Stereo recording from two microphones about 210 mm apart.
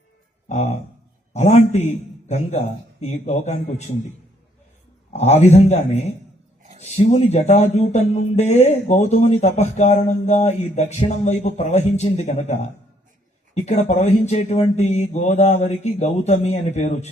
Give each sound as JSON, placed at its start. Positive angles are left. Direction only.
{"t": 0.4, "sound": "speech", "side_deg": 30}
{"t": 5.1, "sound": "speech", "side_deg": 30}